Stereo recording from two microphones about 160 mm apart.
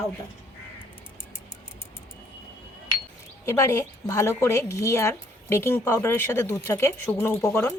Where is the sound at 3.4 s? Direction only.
20° left (ahead or behind).